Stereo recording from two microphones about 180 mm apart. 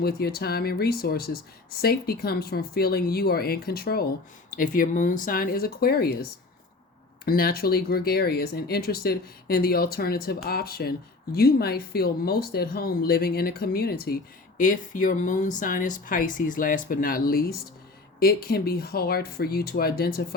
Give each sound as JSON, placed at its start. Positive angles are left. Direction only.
{"t": 0.0, "sound": "speech", "side_deg": 60}
{"t": 7.3, "sound": "speech", "side_deg": 55}